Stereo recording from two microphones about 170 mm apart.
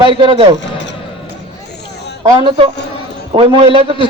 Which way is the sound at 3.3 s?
30° right (ahead or behind).